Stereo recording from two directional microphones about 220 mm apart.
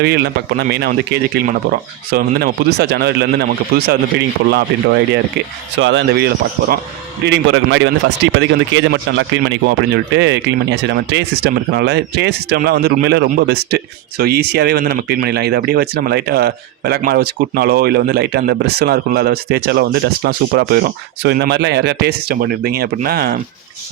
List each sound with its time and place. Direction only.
0.0 s a man's voice: 45° right (ahead or behind)